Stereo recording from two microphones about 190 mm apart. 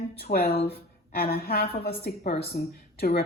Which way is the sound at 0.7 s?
55° left (ahead or behind).